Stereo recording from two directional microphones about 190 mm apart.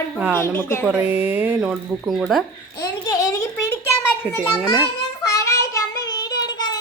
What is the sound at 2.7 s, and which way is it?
Babbling, 20° left (ahead or behind).